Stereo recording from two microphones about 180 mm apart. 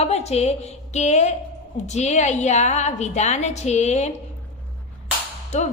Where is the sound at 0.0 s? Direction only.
35° left (ahead or behind).